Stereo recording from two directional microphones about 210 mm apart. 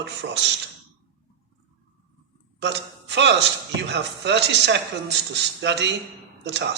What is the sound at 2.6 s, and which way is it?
Speech, 55° right (ahead or behind).